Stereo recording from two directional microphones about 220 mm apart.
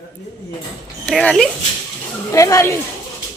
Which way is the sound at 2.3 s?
15° left (ahead or behind).